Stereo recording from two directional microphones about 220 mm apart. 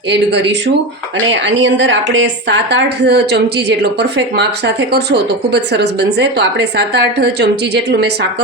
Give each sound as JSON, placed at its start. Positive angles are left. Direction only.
{"t": 0.1, "sound": "a woman's voice", "side_deg": -50}